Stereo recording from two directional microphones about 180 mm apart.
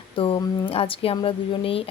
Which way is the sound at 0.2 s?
30° left (ahead or behind).